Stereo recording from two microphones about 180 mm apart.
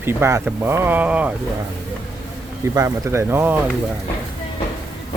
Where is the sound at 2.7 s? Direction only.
15° right (ahead or behind).